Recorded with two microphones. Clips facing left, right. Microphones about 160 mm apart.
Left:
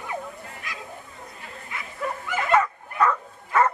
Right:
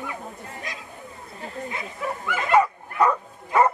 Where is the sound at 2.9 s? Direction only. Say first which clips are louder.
Right 2 dB; 15° right (ahead or behind).